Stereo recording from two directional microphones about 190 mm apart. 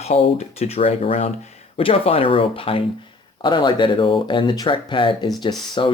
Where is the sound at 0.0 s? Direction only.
35° left (ahead or behind).